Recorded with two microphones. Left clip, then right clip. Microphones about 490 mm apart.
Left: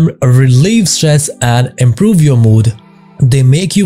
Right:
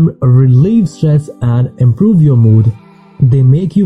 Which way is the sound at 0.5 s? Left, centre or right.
Left.